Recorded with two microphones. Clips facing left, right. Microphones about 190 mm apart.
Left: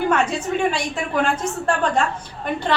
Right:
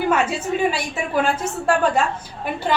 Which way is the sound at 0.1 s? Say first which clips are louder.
Even; 5° right (ahead or behind).